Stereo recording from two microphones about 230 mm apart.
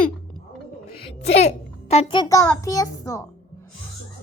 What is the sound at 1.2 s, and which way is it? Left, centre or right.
A child's voice, left.